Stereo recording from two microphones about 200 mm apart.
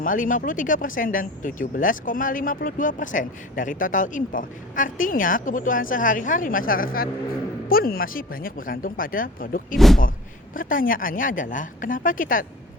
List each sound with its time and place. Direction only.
0.0 s speech: 45° left (ahead or behind)
9.7 s speech: centre (ahead or behind)
10.5 s speech: 45° left (ahead or behind)